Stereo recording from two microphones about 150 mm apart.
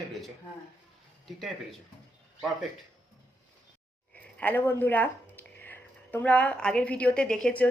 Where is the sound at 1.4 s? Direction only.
Centre (ahead or behind).